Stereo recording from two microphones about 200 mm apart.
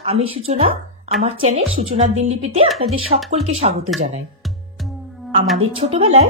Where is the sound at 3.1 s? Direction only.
35° right (ahead or behind).